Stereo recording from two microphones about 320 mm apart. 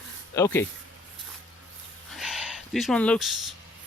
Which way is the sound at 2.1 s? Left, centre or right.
Centre.